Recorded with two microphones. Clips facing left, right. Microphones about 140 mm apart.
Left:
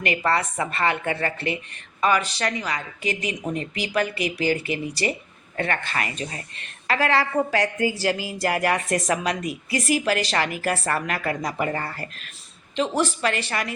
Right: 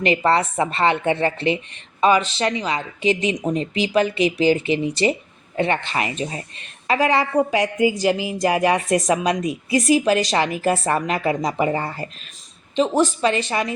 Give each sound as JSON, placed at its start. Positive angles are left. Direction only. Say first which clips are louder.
{"t": 0.0, "sound": "a woman's voice", "louder": "right 5 dB", "side_deg": -25}